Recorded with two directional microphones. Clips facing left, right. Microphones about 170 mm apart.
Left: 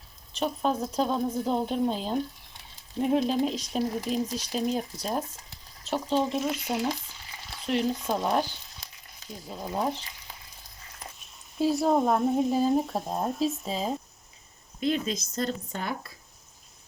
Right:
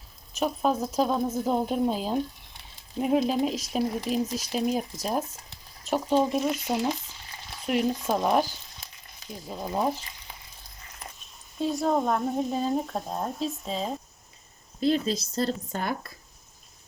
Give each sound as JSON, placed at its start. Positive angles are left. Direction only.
{"t": 0.3, "sound": "speech", "side_deg": -5}
{"t": 7.7, "sound": "speech", "side_deg": -10}
{"t": 11.6, "sound": "speech", "side_deg": 5}
{"t": 14.8, "sound": "a woman's voice", "side_deg": -35}
{"t": 15.7, "sound": "speech", "side_deg": -50}